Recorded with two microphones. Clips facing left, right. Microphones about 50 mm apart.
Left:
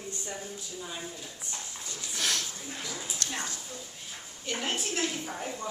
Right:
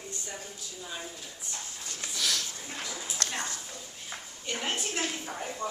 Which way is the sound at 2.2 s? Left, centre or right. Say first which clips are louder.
Left 1 dB; left.